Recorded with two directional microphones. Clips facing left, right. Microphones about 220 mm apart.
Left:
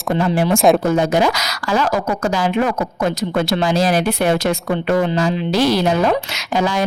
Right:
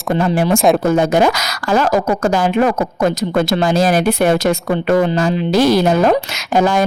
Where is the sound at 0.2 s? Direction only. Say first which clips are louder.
Right 2 dB; 45° right (ahead or behind).